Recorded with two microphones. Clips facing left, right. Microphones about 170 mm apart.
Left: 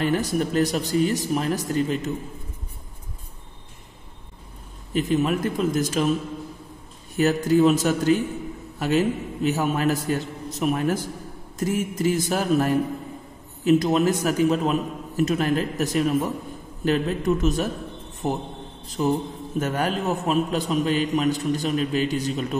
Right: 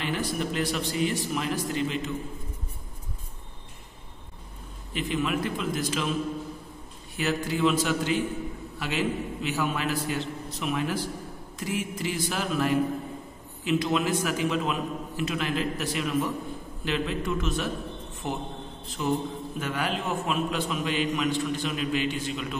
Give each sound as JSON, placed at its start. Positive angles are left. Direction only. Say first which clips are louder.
{"t": 0.0, "sound": "a man's voice", "louder": "left 6 dB", "side_deg": 45}
{"t": 4.9, "sound": "a man's voice", "louder": "left 6 dB", "side_deg": 40}
{"t": 7.2, "sound": "a man's voice", "louder": "left 8 dB", "side_deg": 45}